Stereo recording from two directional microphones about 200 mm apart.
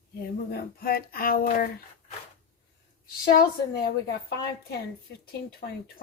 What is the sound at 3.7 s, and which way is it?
Speech, 50° left (ahead or behind).